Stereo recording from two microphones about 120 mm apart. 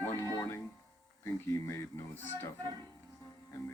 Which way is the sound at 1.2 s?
20° left (ahead or behind).